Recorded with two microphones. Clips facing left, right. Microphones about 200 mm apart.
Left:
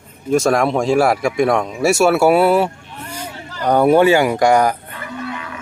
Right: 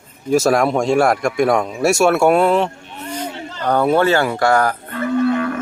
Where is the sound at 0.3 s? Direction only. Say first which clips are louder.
Even; 5° right (ahead or behind); by 4.7 s 15° left (ahead or behind).